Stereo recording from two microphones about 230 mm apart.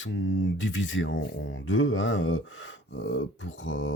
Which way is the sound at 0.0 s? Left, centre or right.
Left.